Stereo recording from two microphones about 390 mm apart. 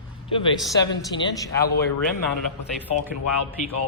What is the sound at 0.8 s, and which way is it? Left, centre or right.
Speech, centre.